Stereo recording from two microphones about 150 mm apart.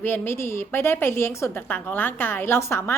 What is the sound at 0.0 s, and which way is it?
A woman's voice, 15° left (ahead or behind).